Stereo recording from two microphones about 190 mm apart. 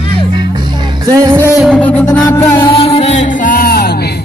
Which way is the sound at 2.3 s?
20° left (ahead or behind).